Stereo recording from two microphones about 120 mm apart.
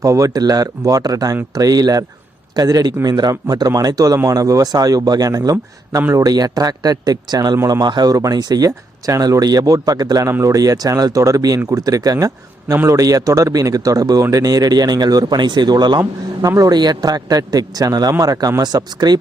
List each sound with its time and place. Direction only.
0.0 s a man's voice: 30° right (ahead or behind)
6.0 s a man's voice: 15° right (ahead or behind)
6.2 s a man's voice: 30° right (ahead or behind)